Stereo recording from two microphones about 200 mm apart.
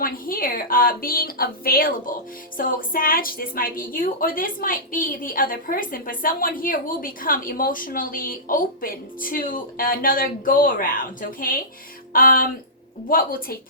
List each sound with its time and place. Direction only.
0.0 s a woman's voice: 45° left (ahead or behind)